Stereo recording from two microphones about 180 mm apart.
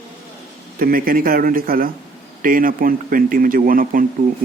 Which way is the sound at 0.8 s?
50° right (ahead or behind).